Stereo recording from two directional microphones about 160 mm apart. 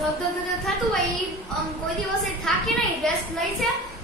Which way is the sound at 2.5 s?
5° left (ahead or behind).